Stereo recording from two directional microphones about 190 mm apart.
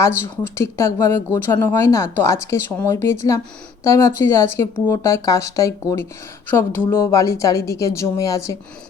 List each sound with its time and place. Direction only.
0.4 s speech: 15° left (ahead or behind)